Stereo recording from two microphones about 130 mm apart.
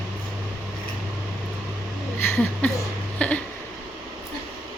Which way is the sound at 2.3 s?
10° left (ahead or behind).